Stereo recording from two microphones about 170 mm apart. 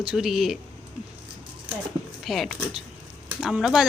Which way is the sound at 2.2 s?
Centre (ahead or behind).